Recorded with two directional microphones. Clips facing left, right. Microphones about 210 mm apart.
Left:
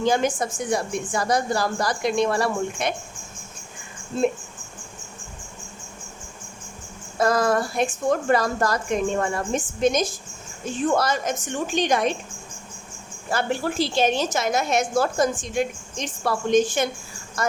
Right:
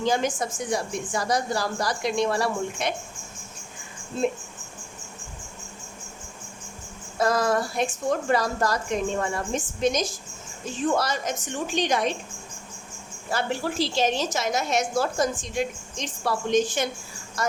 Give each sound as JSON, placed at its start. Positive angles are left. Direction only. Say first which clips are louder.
{"t": 0.0, "sound": "a woman's voice", "louder": "left 3 dB", "side_deg": 55}
{"t": 7.2, "sound": "a woman's voice", "louder": "left 2 dB", "side_deg": 50}
{"t": 13.3, "sound": "a woman's voice", "louder": "left 3 dB", "side_deg": 55}